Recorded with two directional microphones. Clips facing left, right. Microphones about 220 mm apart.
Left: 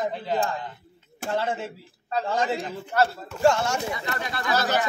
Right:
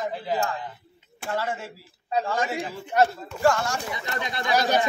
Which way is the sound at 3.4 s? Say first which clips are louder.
Left 2 dB; 25° left (ahead or behind).